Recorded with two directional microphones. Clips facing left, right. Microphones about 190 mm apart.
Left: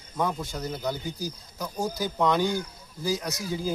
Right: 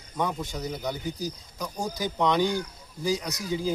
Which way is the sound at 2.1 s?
5° left (ahead or behind).